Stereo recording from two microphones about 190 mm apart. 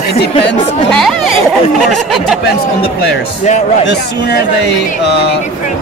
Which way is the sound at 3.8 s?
65° left (ahead or behind).